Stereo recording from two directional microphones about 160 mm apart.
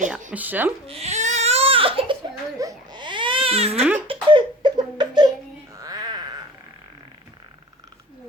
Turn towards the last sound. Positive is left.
turn(degrees=-25)  # may be behind; listen again after turning